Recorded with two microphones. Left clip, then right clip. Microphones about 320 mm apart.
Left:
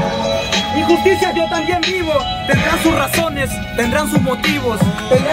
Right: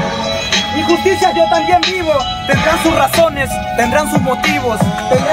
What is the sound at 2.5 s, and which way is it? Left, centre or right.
Music, centre.